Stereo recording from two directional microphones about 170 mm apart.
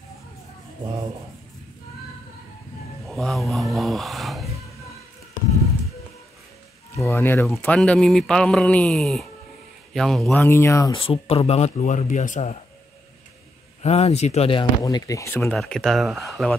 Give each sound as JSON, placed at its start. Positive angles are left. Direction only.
{"t": 3.1, "sound": "a sound", "side_deg": 0}
{"t": 7.0, "sound": "speech", "side_deg": 15}
{"t": 10.3, "sound": "speech", "side_deg": 15}
{"t": 10.9, "sound": "speech", "side_deg": 30}
{"t": 13.8, "sound": "speech", "side_deg": 40}
{"t": 15.5, "sound": "speech", "side_deg": 5}